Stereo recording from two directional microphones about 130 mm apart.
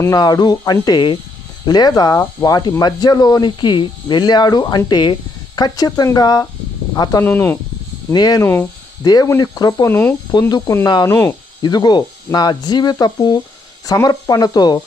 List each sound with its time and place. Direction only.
0.0 s speech: 30° left (ahead or behind)
7.3 s speech: 15° left (ahead or behind)
8.1 s speech: 30° left (ahead or behind)
9.9 s speech: 15° left (ahead or behind)
10.8 s speech: 30° left (ahead or behind)
11.6 s speech: 30° left (ahead or behind)